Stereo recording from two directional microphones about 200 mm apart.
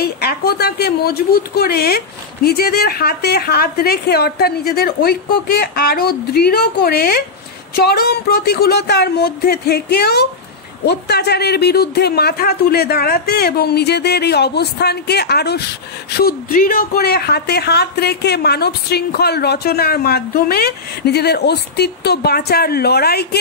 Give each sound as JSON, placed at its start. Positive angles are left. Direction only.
{"t": 0.0, "sound": "a woman's voice", "side_deg": 50}